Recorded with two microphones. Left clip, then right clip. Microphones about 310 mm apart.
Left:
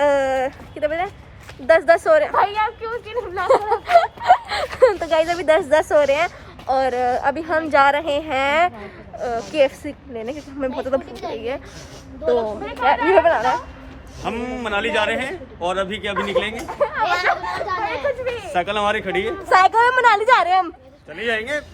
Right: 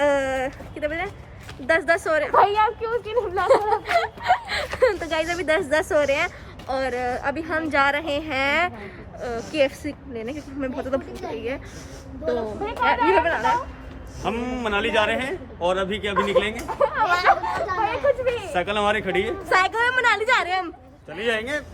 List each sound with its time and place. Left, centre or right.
0.0 s a sound: centre
1.6 s speech: centre
2.3 s speech: centre
13.1 s speech: centre
14.2 s speech: centre
21.1 s speech: centre